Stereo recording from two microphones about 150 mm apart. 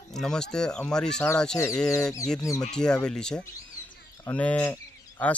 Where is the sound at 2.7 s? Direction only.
5° left (ahead or behind).